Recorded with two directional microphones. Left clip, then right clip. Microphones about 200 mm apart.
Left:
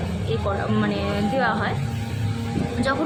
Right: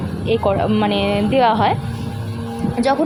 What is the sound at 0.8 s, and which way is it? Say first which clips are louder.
Speech: right 7 dB; 30° right (ahead or behind).